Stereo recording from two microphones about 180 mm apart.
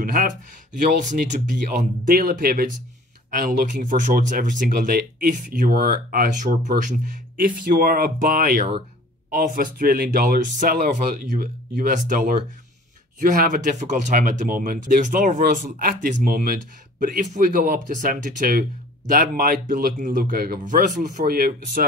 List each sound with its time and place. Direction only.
0.0 s speech: 50° right (ahead or behind)